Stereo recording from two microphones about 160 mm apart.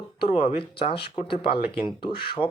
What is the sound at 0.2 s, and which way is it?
Speech, 35° left (ahead or behind).